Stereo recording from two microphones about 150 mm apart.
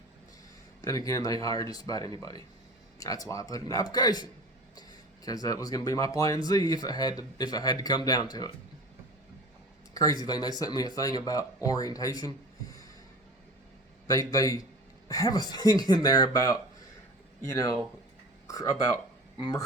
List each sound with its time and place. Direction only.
0.8 s speech: 25° left (ahead or behind)
9.9 s speech: 25° left (ahead or behind)
14.1 s speech: 25° left (ahead or behind)